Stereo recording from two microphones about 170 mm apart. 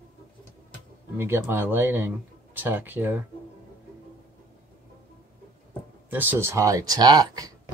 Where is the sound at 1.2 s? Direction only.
15° right (ahead or behind).